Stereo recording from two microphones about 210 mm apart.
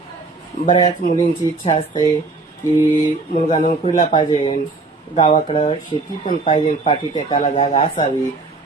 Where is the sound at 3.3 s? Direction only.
30° left (ahead or behind).